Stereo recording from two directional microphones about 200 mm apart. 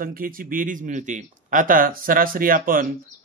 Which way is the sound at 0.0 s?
45° right (ahead or behind).